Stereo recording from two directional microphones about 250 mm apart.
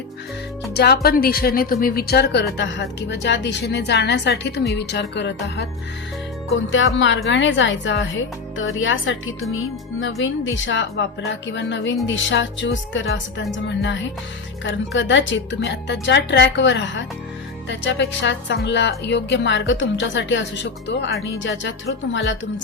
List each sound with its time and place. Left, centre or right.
0.7 s a woman's voice: left
6.7 s a woman's voice: left
9.5 s music: left
10.2 s a woman's voice: left